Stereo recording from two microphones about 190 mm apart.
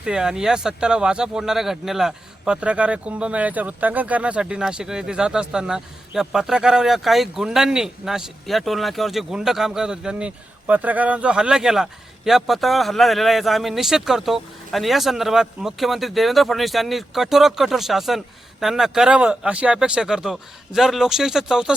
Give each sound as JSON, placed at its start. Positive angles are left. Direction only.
{"t": 0.0, "sound": "speech", "side_deg": -5}